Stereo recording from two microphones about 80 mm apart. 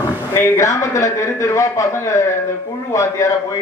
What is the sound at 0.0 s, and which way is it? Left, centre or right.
A man's voice, left.